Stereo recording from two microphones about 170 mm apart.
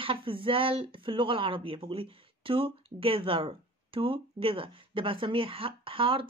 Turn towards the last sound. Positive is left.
turn(degrees=-30)  # may be behind; listen again after turning